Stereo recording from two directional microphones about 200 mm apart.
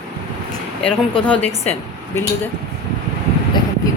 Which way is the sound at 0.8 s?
5° left (ahead or behind).